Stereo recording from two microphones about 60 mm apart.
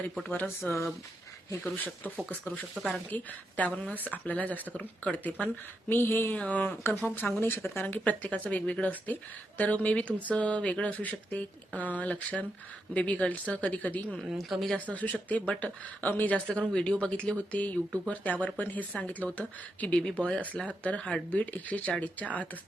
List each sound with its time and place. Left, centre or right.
0.7 s speech: left
2.8 s speech: centre
3.8 s speech: left
5.9 s speech: left
6.3 s speech: left
7.2 s speech: left
14.3 s speech: centre
14.8 s speech: left
16.5 s speech: centre
20.0 s speech: centre